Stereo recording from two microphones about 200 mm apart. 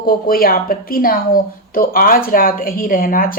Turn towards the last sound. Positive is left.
turn(degrees=45)  # may be behind; listen again after turning